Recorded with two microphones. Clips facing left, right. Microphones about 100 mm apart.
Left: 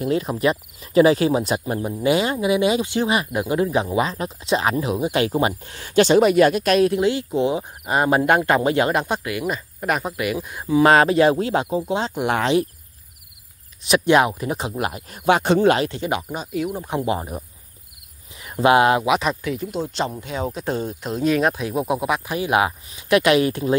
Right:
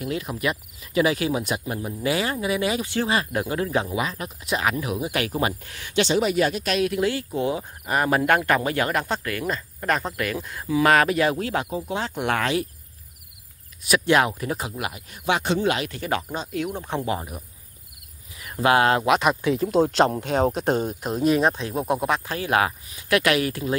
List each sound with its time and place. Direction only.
0.0 s speech: 30° left (ahead or behind)
3.9 s speech: 30° left (ahead or behind); by 6.8 s 55° left (ahead or behind)
6.8 s speech: 25° left (ahead or behind)
10.7 s speech: 25° left (ahead or behind)
13.8 s speech: 20° left (ahead or behind)
14.8 s a man's voice: 40° left (ahead or behind)
15.8 s speech: 25° left (ahead or behind)
18.4 s speech: 20° left (ahead or behind)
19.0 s speech: 5° left (ahead or behind)
19.4 s speech: 30° right (ahead or behind)
19.8 s speech: 60° right (ahead or behind)
21.4 s speech: centre (ahead or behind)
22.3 s speech: 15° left (ahead or behind)